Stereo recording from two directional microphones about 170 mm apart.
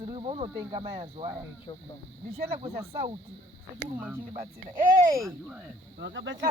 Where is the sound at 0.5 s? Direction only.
20° right (ahead or behind).